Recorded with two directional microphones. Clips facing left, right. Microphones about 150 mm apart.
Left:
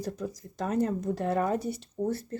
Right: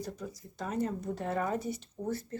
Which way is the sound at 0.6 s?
75° left (ahead or behind).